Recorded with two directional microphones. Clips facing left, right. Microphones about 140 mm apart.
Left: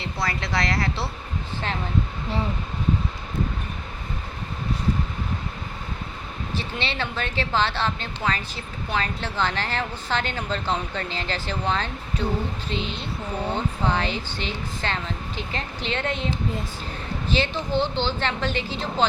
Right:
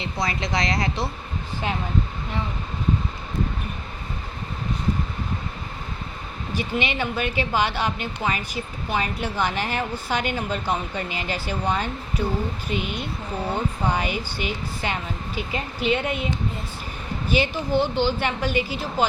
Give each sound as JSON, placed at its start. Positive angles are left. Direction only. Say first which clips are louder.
{"t": 0.0, "sound": "a woman's voice", "louder": "right 2 dB", "side_deg": -20}
{"t": 6.5, "sound": "a woman's voice", "louder": "right 5 dB", "side_deg": -15}